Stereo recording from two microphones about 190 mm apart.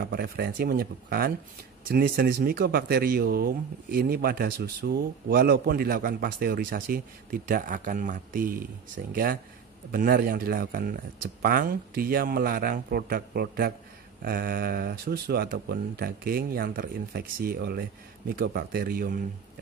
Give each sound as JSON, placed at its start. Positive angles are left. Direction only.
{"t": 0.0, "sound": "speech", "side_deg": -55}